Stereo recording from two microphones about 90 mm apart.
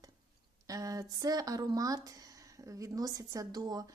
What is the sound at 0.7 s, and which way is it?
A woman's voice, 40° right (ahead or behind).